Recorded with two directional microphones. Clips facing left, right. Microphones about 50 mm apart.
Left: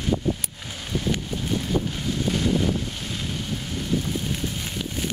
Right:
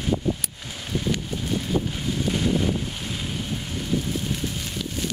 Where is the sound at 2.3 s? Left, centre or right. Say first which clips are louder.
Even; centre.